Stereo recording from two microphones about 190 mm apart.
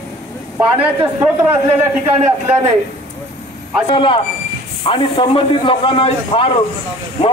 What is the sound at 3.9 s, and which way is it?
A man's voice, 25° left (ahead or behind).